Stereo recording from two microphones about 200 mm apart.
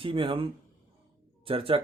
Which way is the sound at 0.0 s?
25° right (ahead or behind).